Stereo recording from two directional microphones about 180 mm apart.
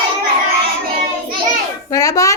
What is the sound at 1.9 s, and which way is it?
Speech, 20° left (ahead or behind).